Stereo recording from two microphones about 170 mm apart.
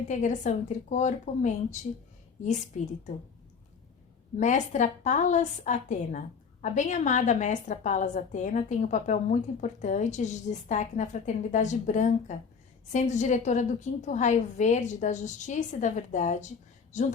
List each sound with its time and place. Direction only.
0.1 s a woman's voice: 45° left (ahead or behind)
4.4 s a woman's voice: 45° left (ahead or behind)